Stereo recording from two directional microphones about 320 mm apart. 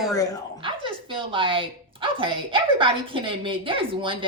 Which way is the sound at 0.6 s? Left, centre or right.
Centre.